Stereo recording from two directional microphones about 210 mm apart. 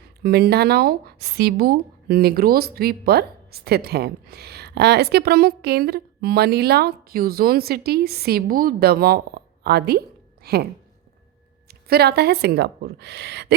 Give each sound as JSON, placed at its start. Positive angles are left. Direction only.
{"t": 0.0, "sound": "speech", "side_deg": -50}
{"t": 11.7, "sound": "speech", "side_deg": -50}